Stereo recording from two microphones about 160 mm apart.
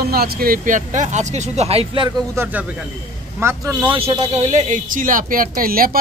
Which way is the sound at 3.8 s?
30° right (ahead or behind).